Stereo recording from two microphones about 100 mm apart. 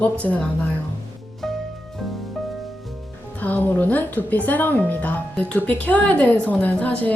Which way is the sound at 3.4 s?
15° left (ahead or behind).